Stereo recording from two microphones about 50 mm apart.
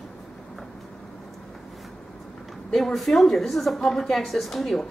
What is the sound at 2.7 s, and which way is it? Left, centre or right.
A woman's voice, centre.